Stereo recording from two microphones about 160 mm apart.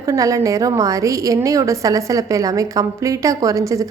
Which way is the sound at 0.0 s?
20° right (ahead or behind).